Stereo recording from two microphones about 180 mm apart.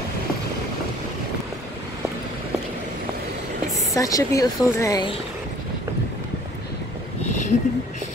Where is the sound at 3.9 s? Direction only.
20° left (ahead or behind).